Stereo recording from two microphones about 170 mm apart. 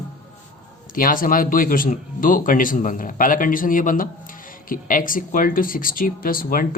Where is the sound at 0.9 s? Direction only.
55° left (ahead or behind).